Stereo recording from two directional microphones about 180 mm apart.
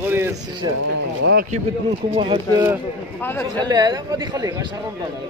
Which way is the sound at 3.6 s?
20° right (ahead or behind).